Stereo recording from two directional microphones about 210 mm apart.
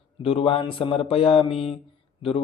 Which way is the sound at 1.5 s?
Centre (ahead or behind).